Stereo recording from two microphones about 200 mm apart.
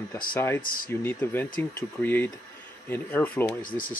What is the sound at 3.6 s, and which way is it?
Speech, 45° left (ahead or behind).